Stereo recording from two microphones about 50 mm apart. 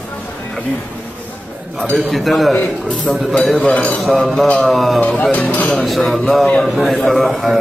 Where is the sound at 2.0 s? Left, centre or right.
Centre.